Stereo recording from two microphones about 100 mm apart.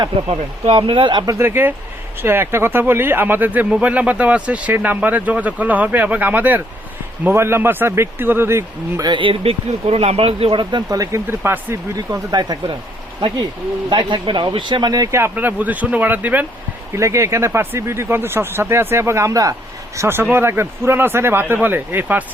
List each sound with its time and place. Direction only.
0.3 s speech: 75° right (ahead or behind); by 1.2 s 60° right (ahead or behind)
1.2 s speech: 30° right (ahead or behind)
9.0 s speech: 50° right (ahead or behind); by 10.6 s 75° right (ahead or behind)
10.6 s speech: 50° right (ahead or behind)
11.3 s speech: 25° right (ahead or behind)
12.3 s speech: 40° right (ahead or behind)
13.9 s speech: 50° right (ahead or behind)
15.1 s speech: 20° right (ahead or behind)
16.9 s speech: 30° right (ahead or behind)
20.0 s speech: 25° right (ahead or behind)